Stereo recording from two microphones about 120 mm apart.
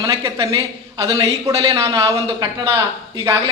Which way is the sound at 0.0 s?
25° right (ahead or behind).